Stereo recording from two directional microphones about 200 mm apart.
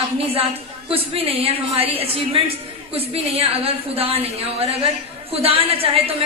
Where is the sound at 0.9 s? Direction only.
30° right (ahead or behind).